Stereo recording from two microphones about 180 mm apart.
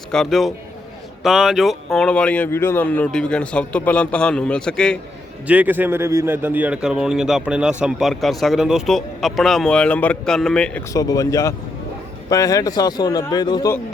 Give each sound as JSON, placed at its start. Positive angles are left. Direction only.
{"t": 0.1, "sound": "a man's voice", "side_deg": 0}
{"t": 5.5, "sound": "a man's voice", "side_deg": -10}
{"t": 10.9, "sound": "a man's voice", "side_deg": 20}